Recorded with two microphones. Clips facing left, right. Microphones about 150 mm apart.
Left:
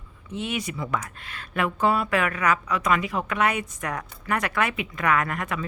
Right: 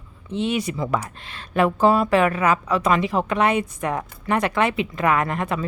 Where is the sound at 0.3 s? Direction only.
30° right (ahead or behind).